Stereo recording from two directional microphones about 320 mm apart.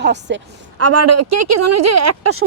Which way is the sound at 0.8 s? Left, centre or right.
Right.